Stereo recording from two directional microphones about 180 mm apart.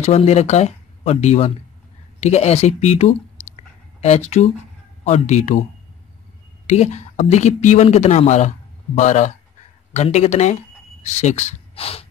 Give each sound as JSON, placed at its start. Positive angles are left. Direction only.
{"t": 0.0, "sound": "speech", "side_deg": 35}
{"t": 3.5, "sound": "a sound", "side_deg": 35}
{"t": 5.0, "sound": "speech", "side_deg": 40}
{"t": 6.7, "sound": "speech", "side_deg": 40}